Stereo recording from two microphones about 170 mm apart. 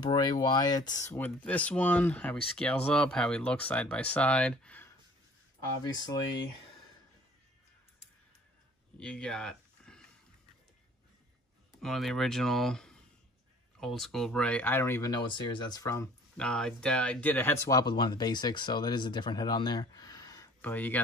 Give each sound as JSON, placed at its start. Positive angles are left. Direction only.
{"t": 0.0, "sound": "speech", "side_deg": 25}
{"t": 1.1, "sound": "speech", "side_deg": 10}
{"t": 9.0, "sound": "speech", "side_deg": 5}
{"t": 11.8, "sound": "speech", "side_deg": 0}
{"t": 16.3, "sound": "speech", "side_deg": 5}
{"t": 20.6, "sound": "speech", "side_deg": 10}